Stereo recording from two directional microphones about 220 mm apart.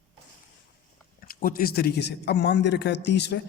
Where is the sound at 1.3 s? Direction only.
40° left (ahead or behind).